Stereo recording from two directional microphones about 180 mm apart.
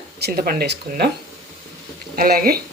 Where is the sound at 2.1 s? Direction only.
55° right (ahead or behind).